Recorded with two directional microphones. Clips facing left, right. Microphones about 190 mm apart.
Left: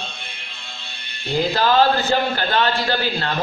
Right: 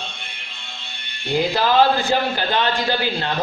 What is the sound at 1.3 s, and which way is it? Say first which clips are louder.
A man's voice: even; 15° right (ahead or behind).